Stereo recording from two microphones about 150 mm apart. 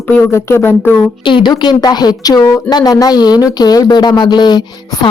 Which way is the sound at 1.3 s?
30° left (ahead or behind).